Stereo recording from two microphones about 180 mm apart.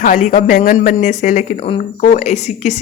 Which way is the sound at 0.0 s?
45° left (ahead or behind).